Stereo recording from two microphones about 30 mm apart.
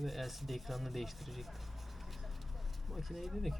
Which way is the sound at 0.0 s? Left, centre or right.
Centre.